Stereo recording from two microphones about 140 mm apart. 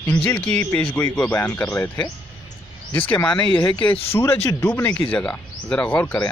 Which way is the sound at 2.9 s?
15° left (ahead or behind).